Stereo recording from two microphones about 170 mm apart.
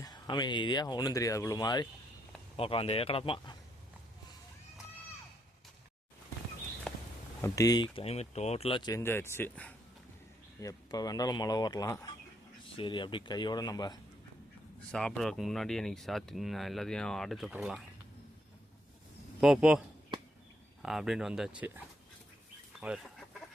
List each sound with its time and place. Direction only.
0.0 s speech: 25° left (ahead or behind)
2.6 s speech: 35° left (ahead or behind)
6.9 s a sound: 5° left (ahead or behind)
7.4 s speech: 20° left (ahead or behind)
8.9 s speech: 15° left (ahead or behind)
10.6 s speech: 20° left (ahead or behind)
14.9 s speech: 5° left (ahead or behind)
19.4 s speech: centre (ahead or behind)
20.8 s speech: centre (ahead or behind)